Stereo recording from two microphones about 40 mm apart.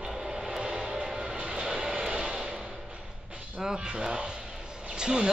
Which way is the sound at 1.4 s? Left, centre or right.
Right.